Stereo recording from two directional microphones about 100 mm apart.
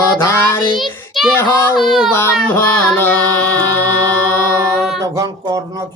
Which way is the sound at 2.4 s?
15° left (ahead or behind).